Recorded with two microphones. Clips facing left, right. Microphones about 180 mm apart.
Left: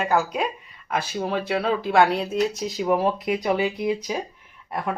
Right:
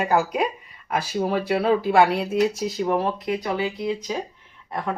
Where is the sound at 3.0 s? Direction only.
15° left (ahead or behind).